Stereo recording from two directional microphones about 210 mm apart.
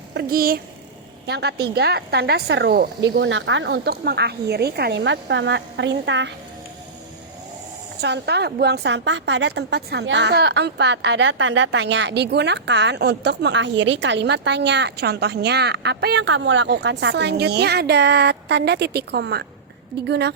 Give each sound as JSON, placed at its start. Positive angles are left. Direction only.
{"t": 0.1, "sound": "a woman's voice", "side_deg": -50}
{"t": 8.0, "sound": "a woman's voice", "side_deg": -55}